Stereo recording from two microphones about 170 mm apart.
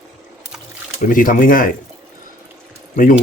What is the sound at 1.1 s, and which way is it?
Speech, 50° left (ahead or behind).